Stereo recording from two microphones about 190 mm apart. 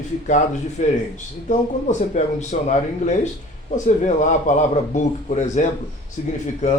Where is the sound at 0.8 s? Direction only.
40° left (ahead or behind).